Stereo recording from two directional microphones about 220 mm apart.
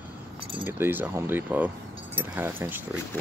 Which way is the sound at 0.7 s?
10° right (ahead or behind).